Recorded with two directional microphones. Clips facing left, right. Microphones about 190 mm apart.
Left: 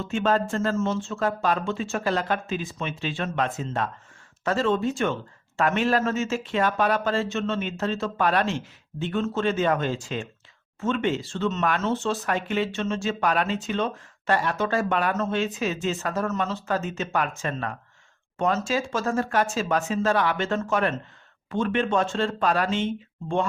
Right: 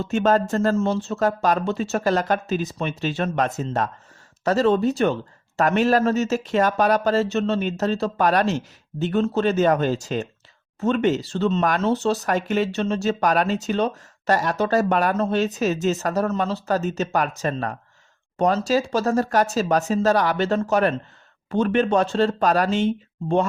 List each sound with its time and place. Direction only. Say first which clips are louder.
0.0 s speech: right 4 dB; 40° right (ahead or behind)